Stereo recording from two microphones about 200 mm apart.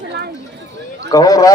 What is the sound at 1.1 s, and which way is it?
Speech, 15° left (ahead or behind).